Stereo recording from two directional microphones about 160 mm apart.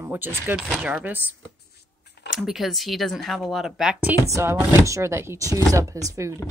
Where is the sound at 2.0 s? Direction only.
90° left.